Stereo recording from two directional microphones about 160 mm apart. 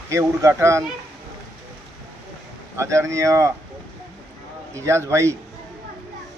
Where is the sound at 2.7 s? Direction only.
15° right (ahead or behind).